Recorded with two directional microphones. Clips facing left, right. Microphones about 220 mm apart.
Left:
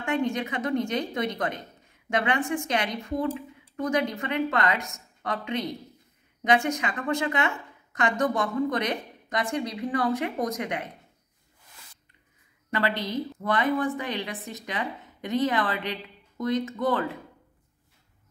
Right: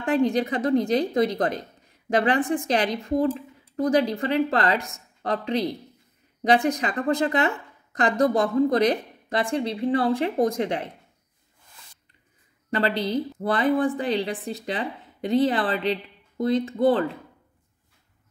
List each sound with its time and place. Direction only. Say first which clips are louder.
0.0 s speech: right 5 dB; 35° right (ahead or behind)
12.7 s speech: right 4 dB; 35° right (ahead or behind)